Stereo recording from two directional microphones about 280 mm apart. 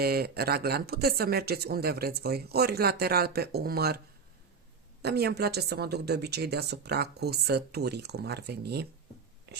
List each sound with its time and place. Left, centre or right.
0.0 s speech: right
5.0 s speech: right
9.5 s whispering: right